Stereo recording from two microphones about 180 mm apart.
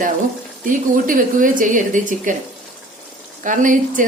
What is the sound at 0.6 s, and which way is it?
A woman's voice, 50° right (ahead or behind).